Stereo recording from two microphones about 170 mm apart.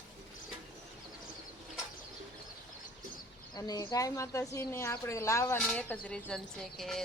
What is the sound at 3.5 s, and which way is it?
A woman's voice, 25° left (ahead or behind).